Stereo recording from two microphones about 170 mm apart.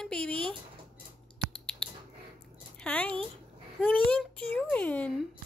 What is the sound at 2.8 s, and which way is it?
Speech, 10° left (ahead or behind).